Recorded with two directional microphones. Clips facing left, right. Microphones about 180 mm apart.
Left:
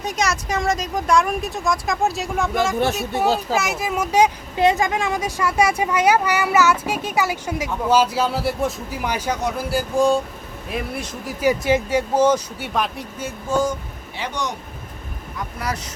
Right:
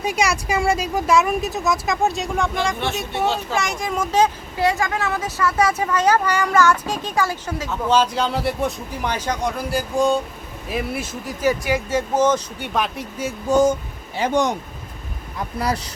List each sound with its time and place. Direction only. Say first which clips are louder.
0.0 s speech: right 2 dB; 10° right (ahead or behind)
3.1 s a child's voice: left 2 dB; 40° left (ahead or behind)
3.5 s speech: left 1 dB; 5° left (ahead or behind)
11.9 s speech: right 1 dB; 10° left (ahead or behind)
13.5 s a sound: right 5 dB; 20° right (ahead or behind)
14.2 s speech: right 8 dB; 50° right (ahead or behind)
15.5 s speech: right 5 dB; 30° right (ahead or behind)